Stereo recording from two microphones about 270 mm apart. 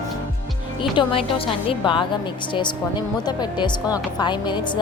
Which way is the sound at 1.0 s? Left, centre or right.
Centre.